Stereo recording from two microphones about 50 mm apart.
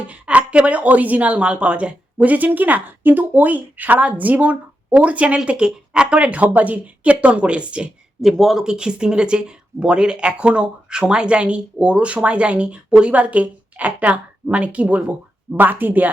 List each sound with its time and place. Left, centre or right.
0.1 s a woman's voice: right
8.2 s speech: centre
8.6 s speech: centre
15.5 s a woman's voice: right